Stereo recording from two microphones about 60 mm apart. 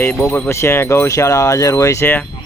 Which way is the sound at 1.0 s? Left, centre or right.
Left.